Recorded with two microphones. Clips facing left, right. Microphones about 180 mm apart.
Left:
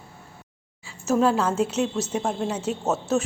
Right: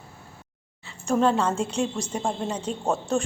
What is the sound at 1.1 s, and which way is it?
Speech, 5° left (ahead or behind).